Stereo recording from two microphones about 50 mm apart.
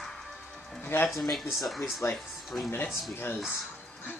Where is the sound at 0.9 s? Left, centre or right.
Left.